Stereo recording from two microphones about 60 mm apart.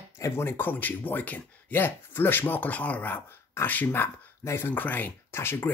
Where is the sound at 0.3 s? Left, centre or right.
Left.